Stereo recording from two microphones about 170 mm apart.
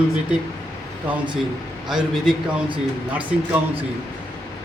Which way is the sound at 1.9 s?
5° right (ahead or behind).